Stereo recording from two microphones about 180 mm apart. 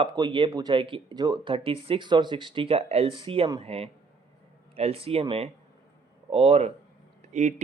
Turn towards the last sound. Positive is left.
turn(degrees=-40)  # may be behind; listen again after turning